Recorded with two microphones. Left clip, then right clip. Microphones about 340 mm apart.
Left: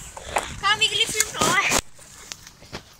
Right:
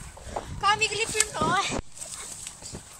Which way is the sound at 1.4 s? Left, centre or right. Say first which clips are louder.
Left 7 dB; left.